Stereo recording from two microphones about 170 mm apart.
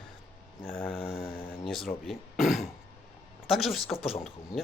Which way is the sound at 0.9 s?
35° left (ahead or behind).